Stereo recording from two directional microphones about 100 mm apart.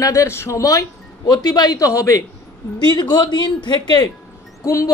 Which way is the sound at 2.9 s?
50° left (ahead or behind).